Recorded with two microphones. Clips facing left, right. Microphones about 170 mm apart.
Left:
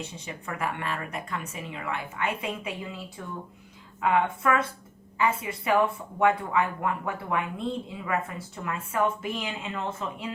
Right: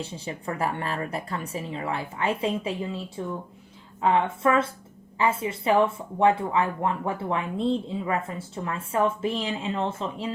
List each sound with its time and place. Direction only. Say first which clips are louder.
0.0 s a woman's voice: right 5 dB; 30° right (ahead or behind)
4.0 s speech: right 2 dB; 30° right (ahead or behind)